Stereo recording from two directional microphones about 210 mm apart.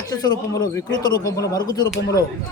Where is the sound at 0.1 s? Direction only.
20° left (ahead or behind).